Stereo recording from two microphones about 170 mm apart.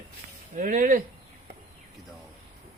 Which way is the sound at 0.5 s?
50° right (ahead or behind).